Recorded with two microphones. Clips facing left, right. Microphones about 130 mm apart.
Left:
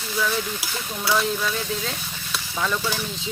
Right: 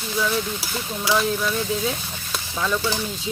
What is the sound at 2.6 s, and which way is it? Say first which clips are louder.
Stir: right 2 dB; 5° right (ahead or behind).